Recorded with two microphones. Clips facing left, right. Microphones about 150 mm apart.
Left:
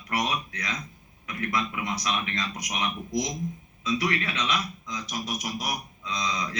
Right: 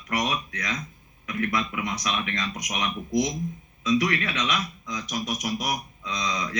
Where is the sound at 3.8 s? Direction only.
30° left (ahead or behind).